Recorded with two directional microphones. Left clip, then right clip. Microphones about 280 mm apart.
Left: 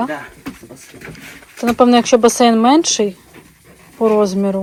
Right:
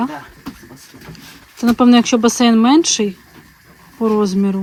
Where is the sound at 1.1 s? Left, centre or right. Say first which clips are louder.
Left 1 dB; centre.